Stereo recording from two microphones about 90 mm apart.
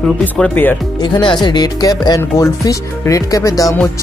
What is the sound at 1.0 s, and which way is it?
Speech, 60° left (ahead or behind).